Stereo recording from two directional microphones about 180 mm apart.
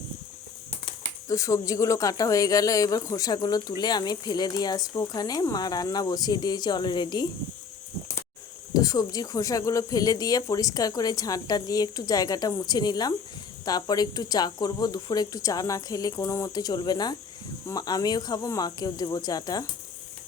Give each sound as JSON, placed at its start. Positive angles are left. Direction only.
{"t": 1.3, "sound": "speech", "side_deg": 20}
{"t": 8.7, "sound": "speech", "side_deg": 20}